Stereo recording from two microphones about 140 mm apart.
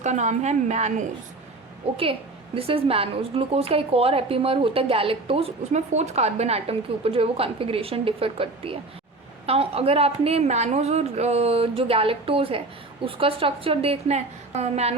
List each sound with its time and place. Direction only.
0.0 s a woman's voice: 55° right (ahead or behind)
2.6 s a woman's voice: 45° right (ahead or behind)